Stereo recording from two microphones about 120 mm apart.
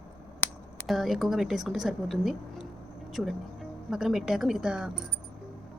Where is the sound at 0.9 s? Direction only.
Centre (ahead or behind).